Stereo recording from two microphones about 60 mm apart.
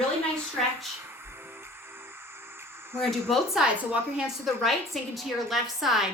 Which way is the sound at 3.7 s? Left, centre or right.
Right.